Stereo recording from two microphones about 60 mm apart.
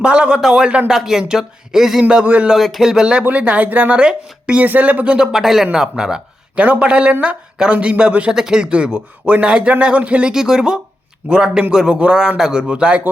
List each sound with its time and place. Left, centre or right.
0.0 s a man's voice: centre
2.2 s a man's voice: right
2.6 s a man's voice: centre; by 5.1 s right
5.1 s a man's voice: centre
6.6 s a man's voice: right
10.3 s a man's voice: centre